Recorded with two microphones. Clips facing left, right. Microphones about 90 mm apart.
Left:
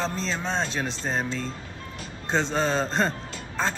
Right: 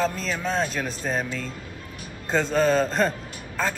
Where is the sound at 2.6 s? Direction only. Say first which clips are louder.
Right 4 dB; 5° right (ahead or behind).